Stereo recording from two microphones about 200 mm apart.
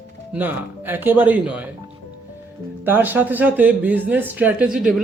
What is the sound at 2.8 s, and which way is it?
Speech, 10° right (ahead or behind).